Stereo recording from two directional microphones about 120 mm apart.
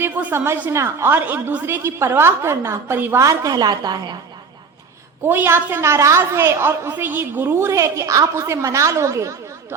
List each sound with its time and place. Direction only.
0.0 s a woman's voice: 15° right (ahead or behind); by 4.2 s 35° right (ahead or behind)
5.2 s a woman's voice: 20° right (ahead or behind)